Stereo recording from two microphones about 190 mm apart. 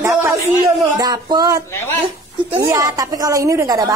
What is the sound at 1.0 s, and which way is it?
A woman's voice, 20° right (ahead or behind).